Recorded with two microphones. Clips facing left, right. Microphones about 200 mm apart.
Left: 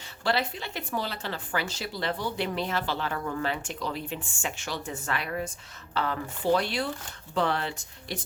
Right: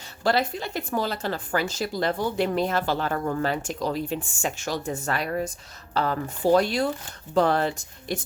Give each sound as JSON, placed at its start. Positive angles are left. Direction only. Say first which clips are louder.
{"t": 0.3, "sound": "speech", "louder": "right 5 dB", "side_deg": -45}